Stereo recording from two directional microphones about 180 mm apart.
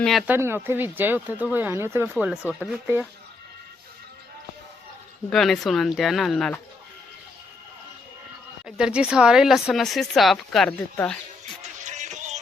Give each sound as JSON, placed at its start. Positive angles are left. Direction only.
{"t": 0.0, "sound": "speech", "side_deg": 0}
{"t": 0.3, "sound": "speech", "side_deg": -15}
{"t": 2.1, "sound": "speech", "side_deg": -5}
{"t": 5.3, "sound": "speech", "side_deg": 0}
{"t": 8.6, "sound": "speech", "side_deg": -5}
{"t": 11.6, "sound": "music", "side_deg": -40}